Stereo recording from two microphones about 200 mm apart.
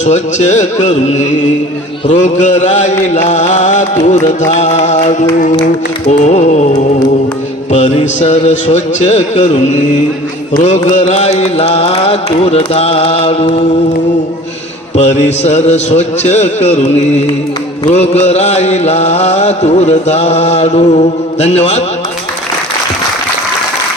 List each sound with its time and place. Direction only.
0.0 s music: 35° left (ahead or behind)
14.9 s music: 35° left (ahead or behind)